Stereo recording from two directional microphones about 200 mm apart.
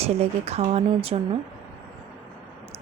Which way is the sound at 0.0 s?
30° right (ahead or behind).